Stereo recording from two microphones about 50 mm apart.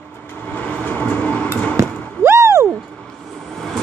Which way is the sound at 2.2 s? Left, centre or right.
Right.